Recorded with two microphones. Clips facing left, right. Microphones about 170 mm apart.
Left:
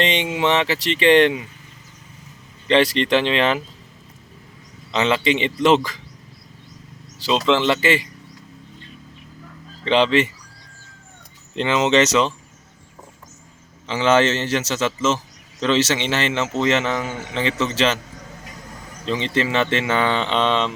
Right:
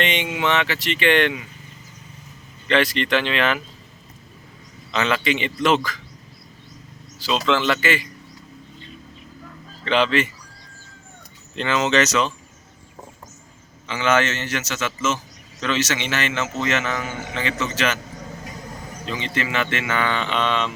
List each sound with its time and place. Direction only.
0.0 s a man's voice: 30° left (ahead or behind)
2.6 s a man's voice: 30° left (ahead or behind)
4.9 s a man's voice: 25° left (ahead or behind)
7.3 s a man's voice: 25° left (ahead or behind)
9.8 s a man's voice: 25° left (ahead or behind)
11.5 s a man's voice: 25° left (ahead or behind)
13.8 s a man's voice: 30° left (ahead or behind)
19.0 s a man's voice: 25° left (ahead or behind)